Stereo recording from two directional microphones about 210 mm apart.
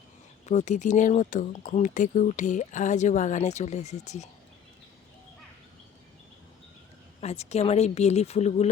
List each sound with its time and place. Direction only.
0.4 s speech: 35° left (ahead or behind)
7.2 s speech: 30° left (ahead or behind)